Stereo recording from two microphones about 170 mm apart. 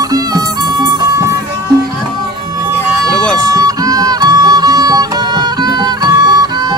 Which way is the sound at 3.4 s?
20° right (ahead or behind).